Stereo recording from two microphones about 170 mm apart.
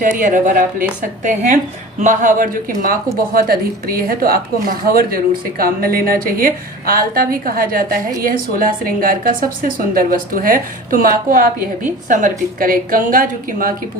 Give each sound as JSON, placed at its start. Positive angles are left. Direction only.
{"t": 0.0, "sound": "a woman's voice", "side_deg": -50}